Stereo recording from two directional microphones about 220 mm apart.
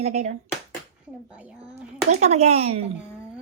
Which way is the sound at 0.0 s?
30° right (ahead or behind).